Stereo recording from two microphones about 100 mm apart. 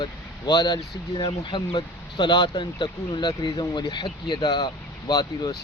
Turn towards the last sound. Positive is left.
turn(degrees=40)  # may be behind; listen again after turning